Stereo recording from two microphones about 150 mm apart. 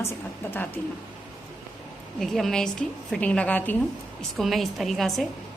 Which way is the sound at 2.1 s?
Centre (ahead or behind).